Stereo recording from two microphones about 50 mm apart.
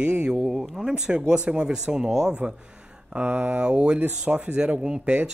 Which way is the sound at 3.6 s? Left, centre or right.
Centre.